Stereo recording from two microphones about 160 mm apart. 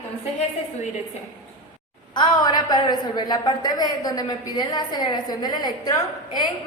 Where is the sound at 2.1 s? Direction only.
25° left (ahead or behind).